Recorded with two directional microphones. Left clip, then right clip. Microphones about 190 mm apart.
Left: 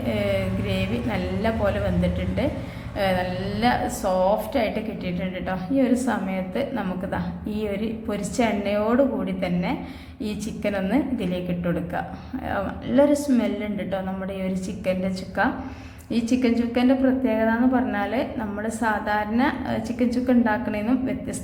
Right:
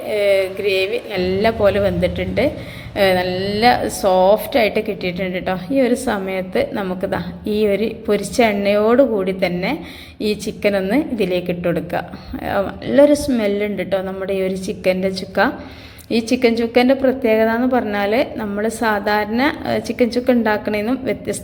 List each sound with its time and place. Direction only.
0.1 s a woman's voice: 25° right (ahead or behind)